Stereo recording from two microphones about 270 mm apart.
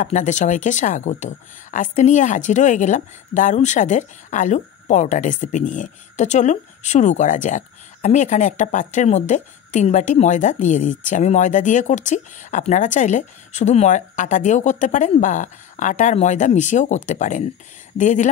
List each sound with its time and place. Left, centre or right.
0.0 s speech: left